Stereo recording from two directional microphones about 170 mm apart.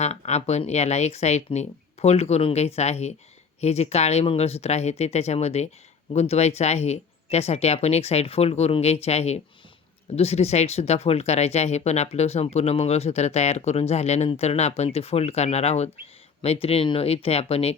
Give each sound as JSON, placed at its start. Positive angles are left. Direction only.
{"t": 0.0, "sound": "speech", "side_deg": 40}